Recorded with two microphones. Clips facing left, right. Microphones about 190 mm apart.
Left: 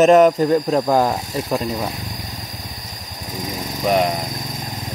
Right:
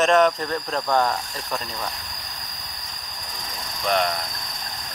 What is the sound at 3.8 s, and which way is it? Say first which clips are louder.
Speech: left 5 dB; 5° left (ahead or behind).